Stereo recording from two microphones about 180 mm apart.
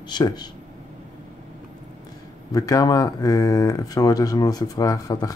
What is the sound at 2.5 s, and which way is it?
Speech, 20° left (ahead or behind).